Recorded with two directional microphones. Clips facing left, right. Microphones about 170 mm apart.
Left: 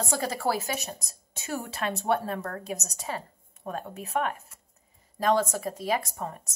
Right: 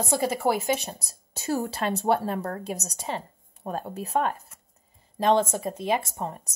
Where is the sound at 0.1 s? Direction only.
15° right (ahead or behind).